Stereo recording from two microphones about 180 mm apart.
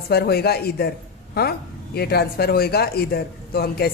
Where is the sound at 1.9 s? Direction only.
60° left (ahead or behind).